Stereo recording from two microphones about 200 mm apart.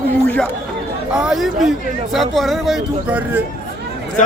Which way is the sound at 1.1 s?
5° right (ahead or behind).